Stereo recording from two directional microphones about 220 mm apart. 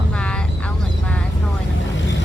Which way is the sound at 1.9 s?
55° left (ahead or behind).